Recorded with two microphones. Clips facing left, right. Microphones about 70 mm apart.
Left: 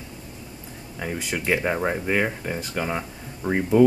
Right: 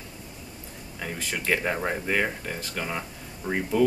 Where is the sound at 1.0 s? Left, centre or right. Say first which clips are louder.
Left 3 dB; centre.